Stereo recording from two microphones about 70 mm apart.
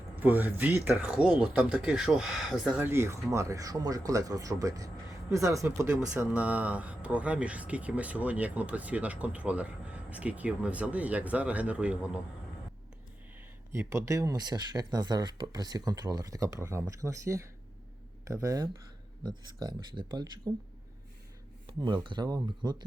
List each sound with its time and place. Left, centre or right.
0.2 s speech: right; by 2.7 s centre
2.8 s speech: right
6.3 s speech: centre
13.7 s speech: right
19.2 s speech: right
21.8 s speech: right
22.6 s speech: right